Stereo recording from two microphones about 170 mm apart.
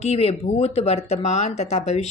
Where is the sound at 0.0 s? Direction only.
35° left (ahead or behind).